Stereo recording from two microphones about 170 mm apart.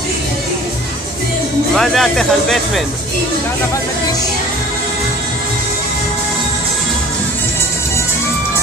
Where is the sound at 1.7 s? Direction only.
Centre (ahead or behind).